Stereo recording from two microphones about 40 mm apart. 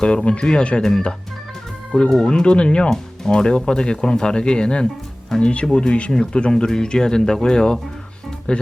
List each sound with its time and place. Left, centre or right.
0.0 s speech: left
5.6 s speech: centre